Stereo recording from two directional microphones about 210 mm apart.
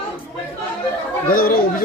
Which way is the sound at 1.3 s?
45° left (ahead or behind).